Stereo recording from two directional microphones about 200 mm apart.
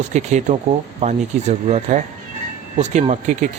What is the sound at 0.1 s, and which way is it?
Speech, 35° right (ahead or behind).